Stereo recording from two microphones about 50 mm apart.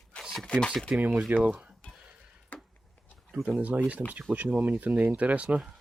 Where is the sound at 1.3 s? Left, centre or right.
Right.